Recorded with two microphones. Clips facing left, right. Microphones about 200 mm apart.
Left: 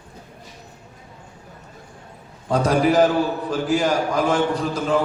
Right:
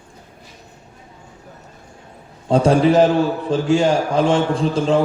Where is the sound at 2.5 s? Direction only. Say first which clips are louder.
Right 4 dB; 25° right (ahead or behind).